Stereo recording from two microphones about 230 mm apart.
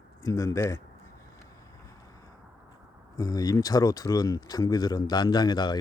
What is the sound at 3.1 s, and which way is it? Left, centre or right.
Speech, centre.